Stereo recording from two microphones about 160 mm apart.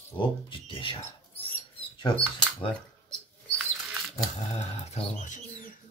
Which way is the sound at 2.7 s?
5° left (ahead or behind).